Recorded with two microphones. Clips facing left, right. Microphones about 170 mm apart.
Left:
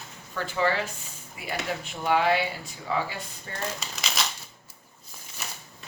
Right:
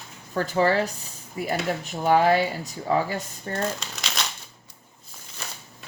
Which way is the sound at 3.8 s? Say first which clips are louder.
Even; centre (ahead or behind).